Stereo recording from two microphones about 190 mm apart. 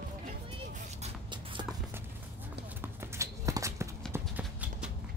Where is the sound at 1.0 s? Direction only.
25° right (ahead or behind).